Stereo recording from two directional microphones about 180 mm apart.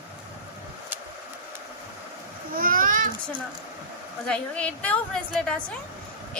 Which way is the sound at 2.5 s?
50° right (ahead or behind).